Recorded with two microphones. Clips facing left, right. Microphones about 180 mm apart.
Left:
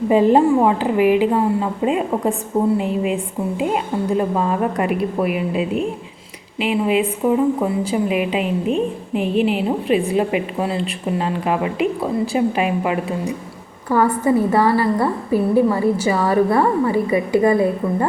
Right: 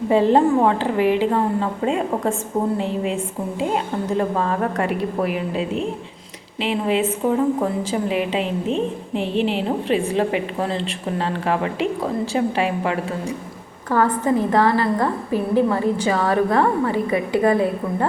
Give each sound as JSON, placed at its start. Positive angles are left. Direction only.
{"t": 0.1, "sound": "a woman's voice", "side_deg": 15}
{"t": 4.2, "sound": "a woman's voice", "side_deg": 15}